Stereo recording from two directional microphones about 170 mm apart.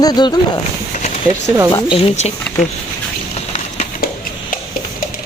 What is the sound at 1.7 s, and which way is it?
Speech, 30° left (ahead or behind).